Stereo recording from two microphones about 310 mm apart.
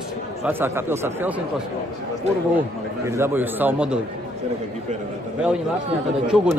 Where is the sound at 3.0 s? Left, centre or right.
Centre.